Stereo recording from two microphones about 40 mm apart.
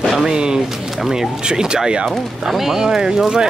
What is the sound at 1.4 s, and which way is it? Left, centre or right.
Speech, right.